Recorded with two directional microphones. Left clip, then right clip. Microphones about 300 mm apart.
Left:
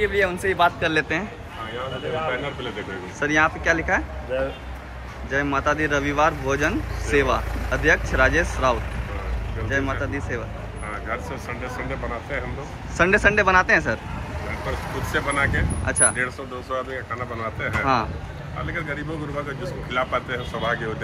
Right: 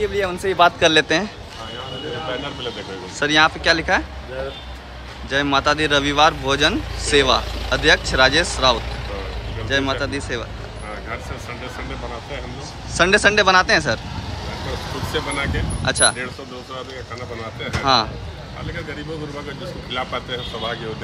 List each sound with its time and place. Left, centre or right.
0.0 s speech: centre
0.8 s speech: centre
3.2 s speech: centre
5.3 s speech: centre
12.9 s speech: centre
15.1 s speech: centre
19.9 s speech: centre